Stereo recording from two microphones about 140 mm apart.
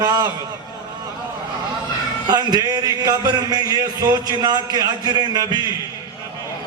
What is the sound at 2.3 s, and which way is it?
Speech, 30° right (ahead or behind).